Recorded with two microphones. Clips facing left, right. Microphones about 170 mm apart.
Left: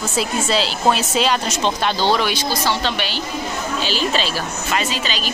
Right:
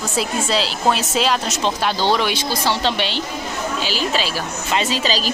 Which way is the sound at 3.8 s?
10° right (ahead or behind).